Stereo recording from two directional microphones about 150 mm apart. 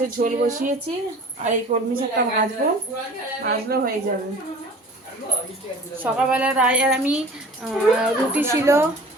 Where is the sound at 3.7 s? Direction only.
90° right.